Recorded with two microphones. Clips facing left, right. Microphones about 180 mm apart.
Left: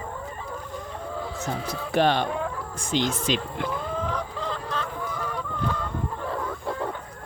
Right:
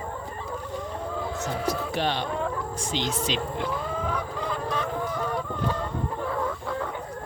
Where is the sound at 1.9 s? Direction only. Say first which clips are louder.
Left 5 dB; 50° left (ahead or behind).